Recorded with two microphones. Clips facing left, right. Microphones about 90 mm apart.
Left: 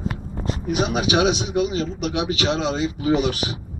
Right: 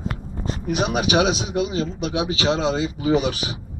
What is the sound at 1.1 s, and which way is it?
A man's voice, 35° right (ahead or behind).